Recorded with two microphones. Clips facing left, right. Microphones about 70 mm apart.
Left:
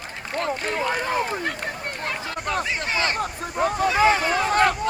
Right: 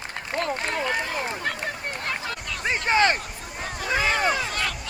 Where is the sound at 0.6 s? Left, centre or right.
Left.